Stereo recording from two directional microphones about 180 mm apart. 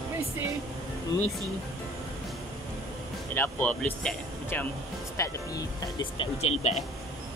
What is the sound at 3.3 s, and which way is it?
Speech, 10° left (ahead or behind).